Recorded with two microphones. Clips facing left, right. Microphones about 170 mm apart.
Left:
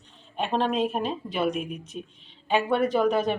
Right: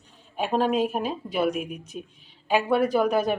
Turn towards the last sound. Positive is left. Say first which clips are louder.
# right 1 dB
turn(degrees=-5)  # may be behind; listen again after turning